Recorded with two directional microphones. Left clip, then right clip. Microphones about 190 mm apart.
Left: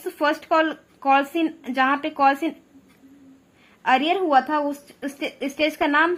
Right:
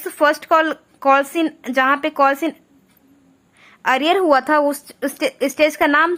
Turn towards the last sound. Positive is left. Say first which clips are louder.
# right 5 dB
turn(degrees=-20)  # may be behind; listen again after turning